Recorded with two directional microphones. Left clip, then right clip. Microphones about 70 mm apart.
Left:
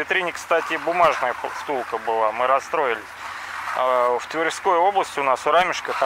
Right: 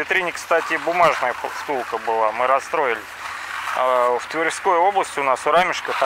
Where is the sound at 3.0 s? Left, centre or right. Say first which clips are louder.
Right 2 dB; right.